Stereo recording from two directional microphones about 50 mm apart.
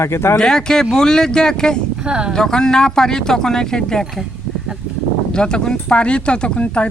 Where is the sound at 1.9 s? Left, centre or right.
Centre.